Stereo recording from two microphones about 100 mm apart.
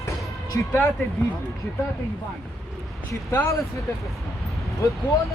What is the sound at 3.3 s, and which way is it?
Speech, 20° left (ahead or behind).